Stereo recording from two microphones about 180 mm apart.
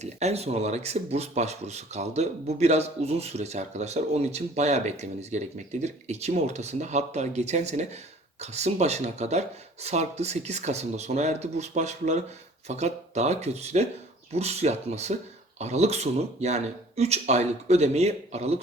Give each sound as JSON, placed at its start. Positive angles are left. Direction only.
{"t": 0.0, "sound": "speech", "side_deg": -35}